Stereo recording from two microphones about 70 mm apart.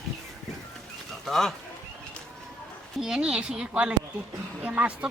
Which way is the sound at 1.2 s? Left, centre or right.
Centre.